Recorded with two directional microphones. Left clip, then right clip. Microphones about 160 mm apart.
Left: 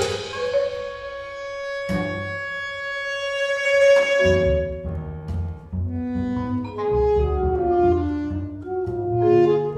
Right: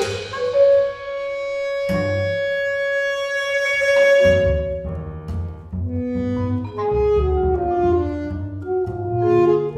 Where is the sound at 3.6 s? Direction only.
10° left (ahead or behind).